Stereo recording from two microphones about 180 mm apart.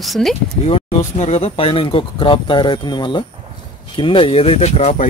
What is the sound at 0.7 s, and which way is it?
Speech, 30° left (ahead or behind).